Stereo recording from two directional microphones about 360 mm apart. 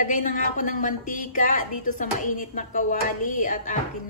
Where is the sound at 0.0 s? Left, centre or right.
Left.